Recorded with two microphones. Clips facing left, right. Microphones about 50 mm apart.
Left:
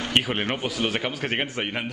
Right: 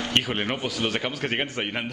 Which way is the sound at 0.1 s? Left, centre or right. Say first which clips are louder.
Left 2 dB; centre.